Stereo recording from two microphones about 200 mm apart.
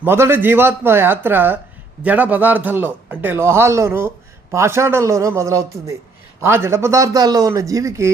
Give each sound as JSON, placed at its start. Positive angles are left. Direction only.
{"t": 0.0, "sound": "a man's voice", "side_deg": -10}